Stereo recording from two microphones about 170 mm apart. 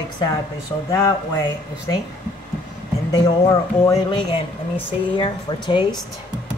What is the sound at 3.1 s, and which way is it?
Speech, 25° left (ahead or behind).